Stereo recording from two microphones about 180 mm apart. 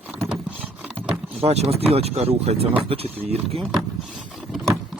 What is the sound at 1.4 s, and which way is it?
Speech, 35° right (ahead or behind).